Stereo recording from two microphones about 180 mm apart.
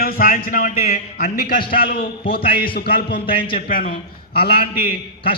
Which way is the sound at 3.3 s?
30° left (ahead or behind).